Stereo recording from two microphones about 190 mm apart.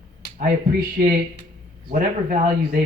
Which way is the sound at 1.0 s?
50° right (ahead or behind).